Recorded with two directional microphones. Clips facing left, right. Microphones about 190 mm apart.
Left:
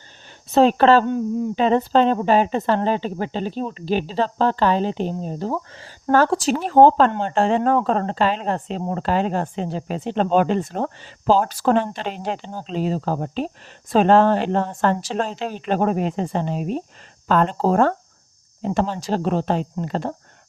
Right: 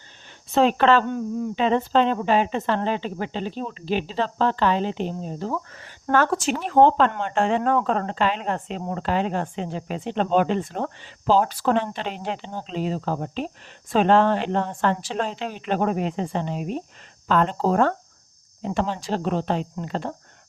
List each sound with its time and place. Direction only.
0.5 s speech: 35° left (ahead or behind)
5.5 s speech: 30° left (ahead or behind)